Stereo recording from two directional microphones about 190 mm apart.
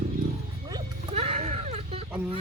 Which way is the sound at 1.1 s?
30° right (ahead or behind).